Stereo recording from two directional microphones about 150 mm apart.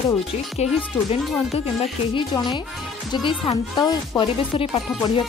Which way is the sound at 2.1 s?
30° left (ahead or behind).